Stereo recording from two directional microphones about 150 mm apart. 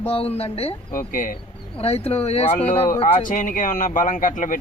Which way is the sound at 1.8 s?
40° left (ahead or behind).